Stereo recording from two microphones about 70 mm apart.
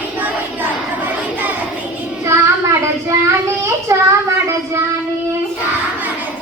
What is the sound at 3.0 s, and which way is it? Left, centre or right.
Child singing, right.